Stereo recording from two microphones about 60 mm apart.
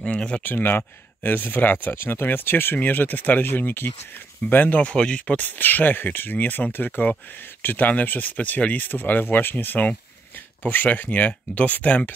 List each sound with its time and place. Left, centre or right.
0.0 s speech: centre
0.4 s speech: left
4.9 s speech: centre